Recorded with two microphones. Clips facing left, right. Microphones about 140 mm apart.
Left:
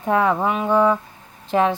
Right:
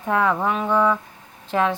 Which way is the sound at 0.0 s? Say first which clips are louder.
Left 2 dB; 20° left (ahead or behind).